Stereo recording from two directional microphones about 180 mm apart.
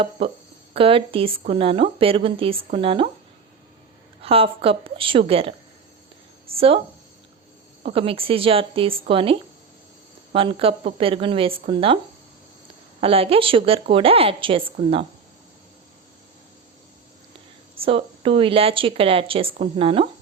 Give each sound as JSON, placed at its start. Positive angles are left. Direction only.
{"t": 0.2, "sound": "speech", "side_deg": -30}
{"t": 4.2, "sound": "speech", "side_deg": -30}
{"t": 6.6, "sound": "speech", "side_deg": -30}
{"t": 7.9, "sound": "speech", "side_deg": -30}
{"t": 13.0, "sound": "speech", "side_deg": -30}
{"t": 17.7, "sound": "speech", "side_deg": -30}